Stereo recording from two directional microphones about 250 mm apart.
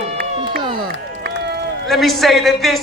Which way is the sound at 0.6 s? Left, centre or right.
Centre.